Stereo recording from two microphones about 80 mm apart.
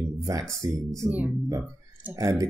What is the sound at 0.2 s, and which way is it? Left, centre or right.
Speech, right.